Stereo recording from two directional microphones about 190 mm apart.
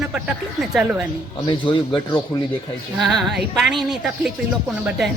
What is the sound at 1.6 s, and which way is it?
Speech, 25° left (ahead or behind).